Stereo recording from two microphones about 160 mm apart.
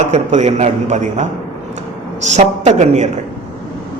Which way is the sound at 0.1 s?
45° right (ahead or behind).